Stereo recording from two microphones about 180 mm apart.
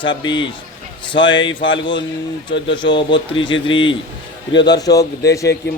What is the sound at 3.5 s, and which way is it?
Speech, 90° left.